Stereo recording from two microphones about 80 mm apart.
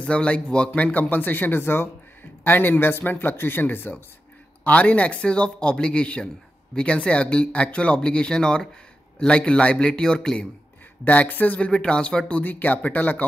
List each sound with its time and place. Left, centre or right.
0.0 s speech: centre
11.1 s speech: left